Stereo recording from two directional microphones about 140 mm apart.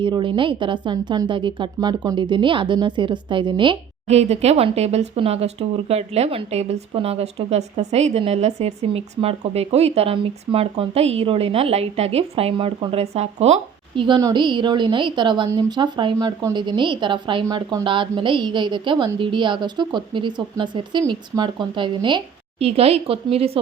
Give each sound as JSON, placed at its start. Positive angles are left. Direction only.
{"t": 0.0, "sound": "a woman's voice", "side_deg": -35}
{"t": 4.1, "sound": "speech", "side_deg": -50}
{"t": 13.9, "sound": "a woman's voice", "side_deg": -35}
{"t": 17.4, "sound": "a woman's voice", "side_deg": -25}